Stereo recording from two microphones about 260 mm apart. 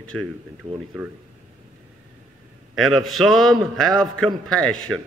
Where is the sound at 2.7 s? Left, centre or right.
Centre.